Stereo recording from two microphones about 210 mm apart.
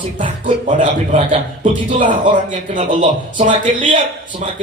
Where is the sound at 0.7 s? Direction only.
35° right (ahead or behind).